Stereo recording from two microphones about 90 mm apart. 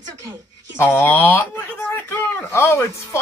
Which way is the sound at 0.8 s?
25° left (ahead or behind).